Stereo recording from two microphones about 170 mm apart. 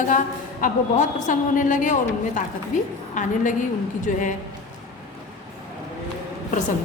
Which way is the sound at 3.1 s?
50° left (ahead or behind).